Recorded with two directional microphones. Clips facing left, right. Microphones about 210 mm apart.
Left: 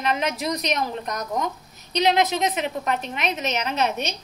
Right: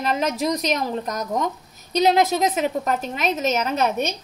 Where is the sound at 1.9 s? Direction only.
45° right (ahead or behind).